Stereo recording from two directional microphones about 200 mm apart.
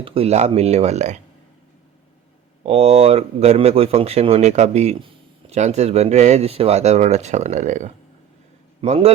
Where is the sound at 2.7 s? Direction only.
30° right (ahead or behind).